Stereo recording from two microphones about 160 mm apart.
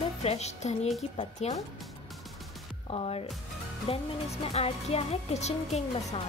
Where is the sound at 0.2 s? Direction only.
40° left (ahead or behind).